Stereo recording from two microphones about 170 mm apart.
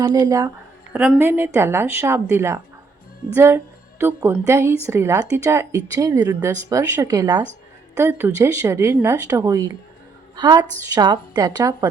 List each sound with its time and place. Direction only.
0.0 s a woman's voice: 25° right (ahead or behind)
0.9 s a woman's voice: 10° right (ahead or behind)